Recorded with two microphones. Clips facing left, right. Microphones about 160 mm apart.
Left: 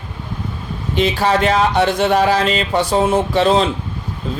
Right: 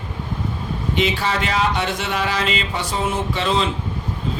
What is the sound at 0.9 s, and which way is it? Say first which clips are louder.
A man's voice: left 6 dB; 40° left (ahead or behind).